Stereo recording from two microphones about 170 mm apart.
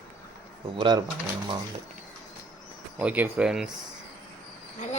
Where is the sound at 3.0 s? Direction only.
10° right (ahead or behind).